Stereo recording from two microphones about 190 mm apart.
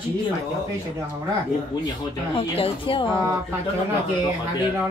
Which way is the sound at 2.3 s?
30° left (ahead or behind).